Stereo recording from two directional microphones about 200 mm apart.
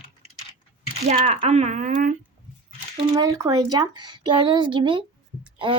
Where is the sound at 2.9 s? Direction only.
25° right (ahead or behind).